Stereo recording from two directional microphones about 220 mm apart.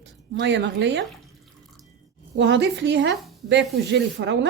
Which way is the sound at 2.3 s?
55° right (ahead or behind).